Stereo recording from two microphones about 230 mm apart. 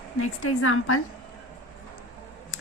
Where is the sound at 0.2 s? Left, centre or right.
Left.